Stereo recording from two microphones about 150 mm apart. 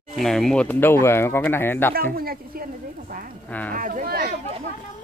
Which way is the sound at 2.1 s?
85° right.